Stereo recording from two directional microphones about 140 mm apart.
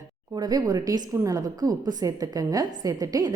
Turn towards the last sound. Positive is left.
turn(degrees=-25)  # may be behind; listen again after turning